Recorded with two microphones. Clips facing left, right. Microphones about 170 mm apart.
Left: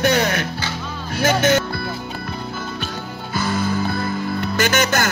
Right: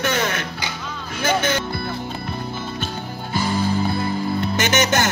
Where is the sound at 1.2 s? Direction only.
40° left (ahead or behind).